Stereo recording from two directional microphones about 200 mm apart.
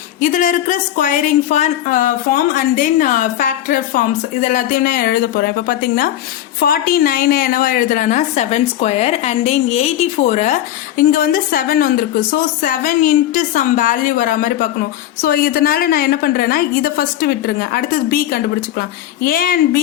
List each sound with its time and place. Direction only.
0.2 s a woman's voice: 40° left (ahead or behind)
10.9 s a woman's voice: 45° left (ahead or behind)